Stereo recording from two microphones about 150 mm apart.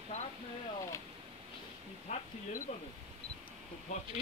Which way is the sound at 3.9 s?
50° left (ahead or behind).